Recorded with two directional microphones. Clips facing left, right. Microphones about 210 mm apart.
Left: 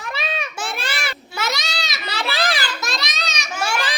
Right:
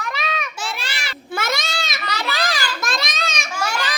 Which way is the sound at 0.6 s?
55° left (ahead or behind).